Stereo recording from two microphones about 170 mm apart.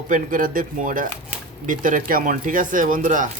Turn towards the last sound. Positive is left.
turn(degrees=-50)  # may be behind; listen again after turning